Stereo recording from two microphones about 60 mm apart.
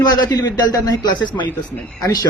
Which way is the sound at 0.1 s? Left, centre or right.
Left.